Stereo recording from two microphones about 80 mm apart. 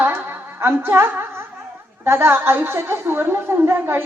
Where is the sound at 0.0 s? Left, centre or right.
Right.